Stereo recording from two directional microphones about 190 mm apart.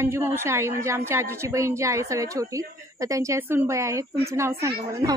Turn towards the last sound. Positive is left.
turn(degrees=-15)  # may be behind; listen again after turning